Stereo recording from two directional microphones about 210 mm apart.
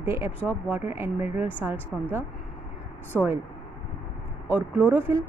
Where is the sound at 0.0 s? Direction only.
10° right (ahead or behind).